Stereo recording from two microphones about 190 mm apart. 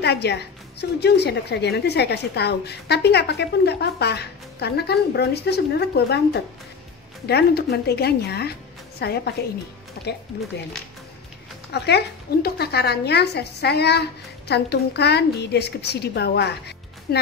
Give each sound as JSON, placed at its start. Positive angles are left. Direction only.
{"t": 0.0, "sound": "a woman's voice", "side_deg": 60}
{"t": 10.0, "sound": "music", "side_deg": 55}
{"t": 11.7, "sound": "a woman's voice", "side_deg": 60}